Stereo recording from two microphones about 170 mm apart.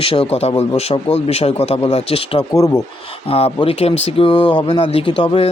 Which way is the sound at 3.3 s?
35° left (ahead or behind).